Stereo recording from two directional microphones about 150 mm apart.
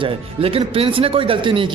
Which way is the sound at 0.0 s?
40° right (ahead or behind).